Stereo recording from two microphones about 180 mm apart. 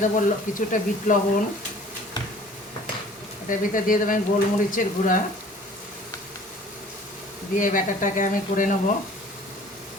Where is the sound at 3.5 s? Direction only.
50° left (ahead or behind).